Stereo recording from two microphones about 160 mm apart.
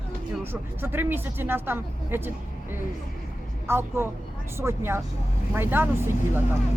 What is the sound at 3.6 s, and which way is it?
Speech, 15° right (ahead or behind).